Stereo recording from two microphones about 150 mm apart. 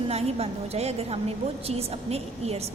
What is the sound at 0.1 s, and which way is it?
A woman's voice, 45° right (ahead or behind).